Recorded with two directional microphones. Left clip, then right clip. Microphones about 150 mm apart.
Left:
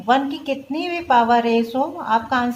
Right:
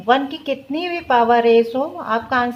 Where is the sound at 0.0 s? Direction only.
30° right (ahead or behind).